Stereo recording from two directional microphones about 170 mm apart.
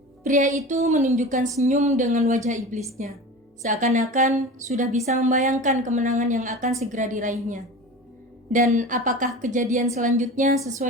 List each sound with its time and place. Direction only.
0.3 s speech: 45° right (ahead or behind)